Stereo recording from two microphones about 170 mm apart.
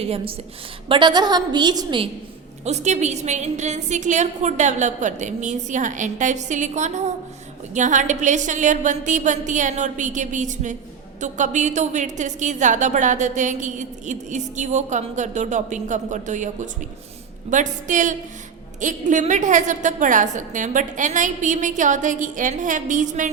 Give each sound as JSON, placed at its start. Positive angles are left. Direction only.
{"t": 0.0, "sound": "a woman's voice", "side_deg": -35}
{"t": 2.6, "sound": "a woman's voice", "side_deg": -40}